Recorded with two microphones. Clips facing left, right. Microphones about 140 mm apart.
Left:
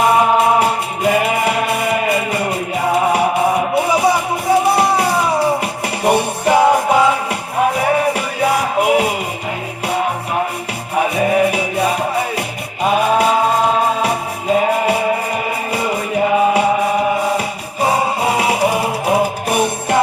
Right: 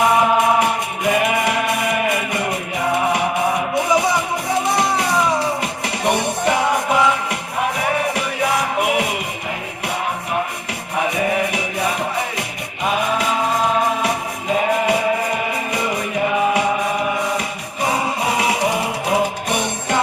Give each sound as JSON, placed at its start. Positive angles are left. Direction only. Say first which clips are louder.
{"t": 0.0, "sound": "music", "louder": "left 3 dB", "side_deg": 25}
{"t": 11.1, "sound": "music", "louder": "left 6 dB", "side_deg": 25}
{"t": 14.5, "sound": "music", "louder": "left 3 dB", "side_deg": 25}